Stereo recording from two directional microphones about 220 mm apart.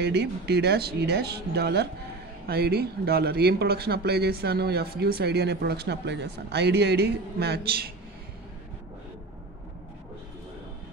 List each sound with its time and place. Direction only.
0.0 s speech: 50° right (ahead or behind)